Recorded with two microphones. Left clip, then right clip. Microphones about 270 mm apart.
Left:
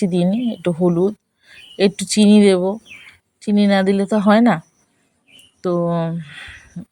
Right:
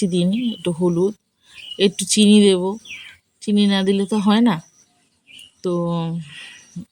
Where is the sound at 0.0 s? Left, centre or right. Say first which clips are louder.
Left 2 dB; left.